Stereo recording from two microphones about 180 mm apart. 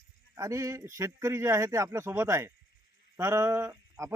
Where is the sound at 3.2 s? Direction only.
15° right (ahead or behind).